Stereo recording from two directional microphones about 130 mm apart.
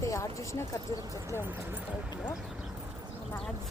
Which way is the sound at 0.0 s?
25° left (ahead or behind).